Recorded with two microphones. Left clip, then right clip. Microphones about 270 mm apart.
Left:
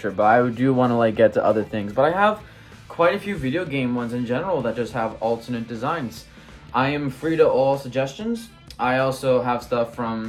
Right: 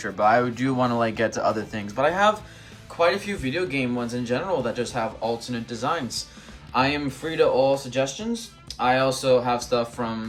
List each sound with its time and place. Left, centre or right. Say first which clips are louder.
0.0 s speech: left 3 dB; centre
2.0 s speech: left 2 dB; centre